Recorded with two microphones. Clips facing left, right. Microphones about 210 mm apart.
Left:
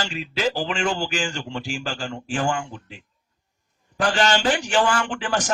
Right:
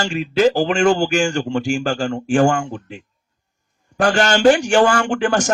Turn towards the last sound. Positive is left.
turn(degrees=-45)  # may be behind; listen again after turning